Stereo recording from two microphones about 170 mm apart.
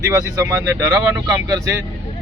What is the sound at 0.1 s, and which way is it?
Speech, 15° right (ahead or behind).